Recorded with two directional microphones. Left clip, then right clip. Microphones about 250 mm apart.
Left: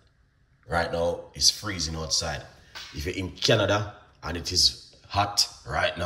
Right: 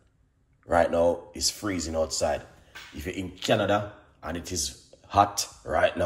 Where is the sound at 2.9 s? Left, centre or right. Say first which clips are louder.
Left 3 dB; centre.